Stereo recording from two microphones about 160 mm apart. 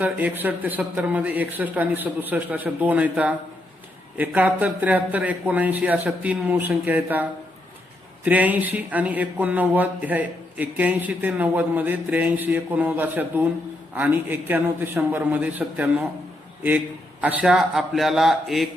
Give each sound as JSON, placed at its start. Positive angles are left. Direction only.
{"t": 0.0, "sound": "a man's voice", "side_deg": -10}